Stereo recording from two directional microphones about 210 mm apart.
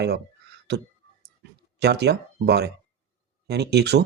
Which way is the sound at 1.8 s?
50° right (ahead or behind).